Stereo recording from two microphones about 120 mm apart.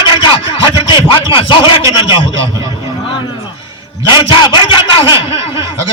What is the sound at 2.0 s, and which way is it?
Speech, 40° left (ahead or behind).